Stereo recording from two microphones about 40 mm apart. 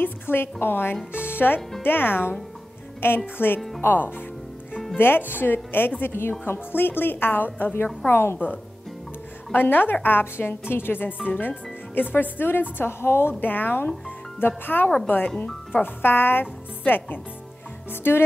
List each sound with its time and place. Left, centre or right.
0.0 s speech: left
3.0 s a woman's voice: left
3.3 s speech: left
6.4 s speech: left
8.1 s a woman's voice: left
9.5 s speech: left
13.4 s speech: left
18.1 s a woman's voice: left